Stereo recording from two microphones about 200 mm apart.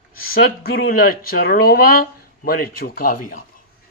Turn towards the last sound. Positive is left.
turn(degrees=45)  # may be behind; listen again after turning